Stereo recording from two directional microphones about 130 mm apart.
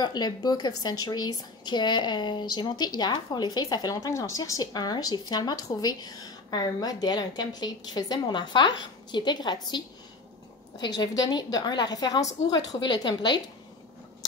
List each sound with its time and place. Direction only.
0.0 s a woman's voice: 35° left (ahead or behind)